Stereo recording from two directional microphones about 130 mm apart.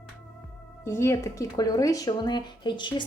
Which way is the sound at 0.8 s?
20° left (ahead or behind).